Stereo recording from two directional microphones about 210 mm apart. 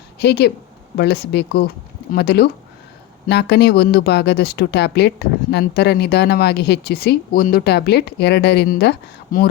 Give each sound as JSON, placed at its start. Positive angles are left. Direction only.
{"t": 0.2, "sound": "speech", "side_deg": 50}